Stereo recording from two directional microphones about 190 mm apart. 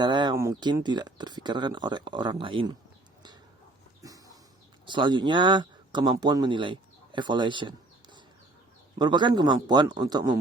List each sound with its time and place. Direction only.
0.0 s speech: 25° right (ahead or behind)
4.0 s a sound: 20° right (ahead or behind)
4.9 s speech: 25° right (ahead or behind)
9.0 s speech: 25° right (ahead or behind)